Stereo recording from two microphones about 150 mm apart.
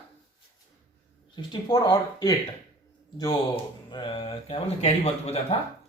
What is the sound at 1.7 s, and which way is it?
Speech, 30° left (ahead or behind).